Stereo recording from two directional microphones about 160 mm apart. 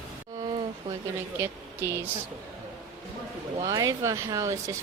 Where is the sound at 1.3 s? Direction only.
15° right (ahead or behind).